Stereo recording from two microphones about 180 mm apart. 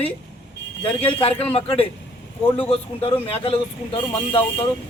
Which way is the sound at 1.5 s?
35° left (ahead or behind).